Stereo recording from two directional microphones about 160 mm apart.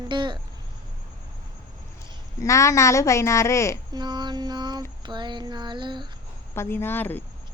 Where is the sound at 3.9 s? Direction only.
25° right (ahead or behind).